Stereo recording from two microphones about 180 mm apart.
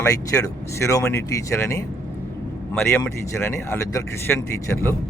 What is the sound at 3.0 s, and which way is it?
Speech, 15° left (ahead or behind).